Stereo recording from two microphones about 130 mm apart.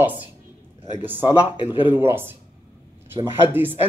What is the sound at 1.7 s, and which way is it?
Speech, 15° right (ahead or behind).